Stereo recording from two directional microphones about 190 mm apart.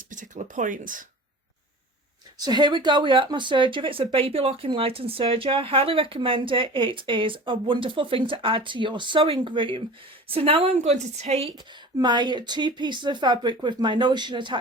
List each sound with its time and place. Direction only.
0.1 s speech: 40° right (ahead or behind)
2.4 s a woman's voice: 20° right (ahead or behind)
11.5 s speech: 25° right (ahead or behind)